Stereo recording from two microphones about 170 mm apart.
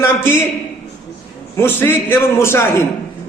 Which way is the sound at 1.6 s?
15° left (ahead or behind).